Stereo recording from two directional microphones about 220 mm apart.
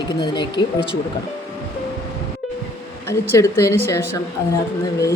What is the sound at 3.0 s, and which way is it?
A woman's voice, 10° left (ahead or behind).